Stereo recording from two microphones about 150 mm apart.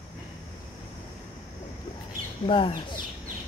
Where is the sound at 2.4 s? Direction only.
35° left (ahead or behind).